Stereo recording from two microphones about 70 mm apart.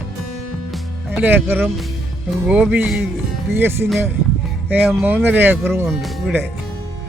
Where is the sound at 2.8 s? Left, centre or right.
Centre.